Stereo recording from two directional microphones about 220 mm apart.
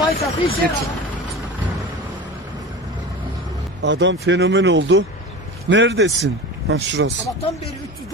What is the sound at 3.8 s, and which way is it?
Speech, 55° right (ahead or behind).